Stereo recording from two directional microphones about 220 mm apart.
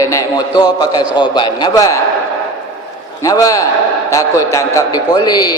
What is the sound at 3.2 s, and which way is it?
A man's voice, 15° left (ahead or behind).